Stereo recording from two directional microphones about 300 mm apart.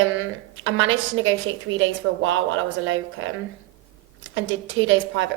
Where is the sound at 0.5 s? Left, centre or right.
Right.